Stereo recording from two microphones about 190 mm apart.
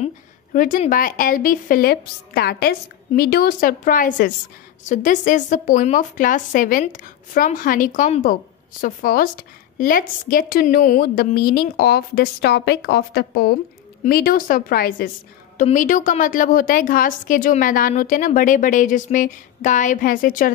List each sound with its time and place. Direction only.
0.0 s a woman's voice: 45° left (ahead or behind)
15.5 s a woman's voice: 40° left (ahead or behind)